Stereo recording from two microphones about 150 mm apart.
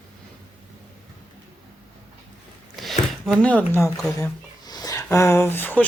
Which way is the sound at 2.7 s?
Centre (ahead or behind).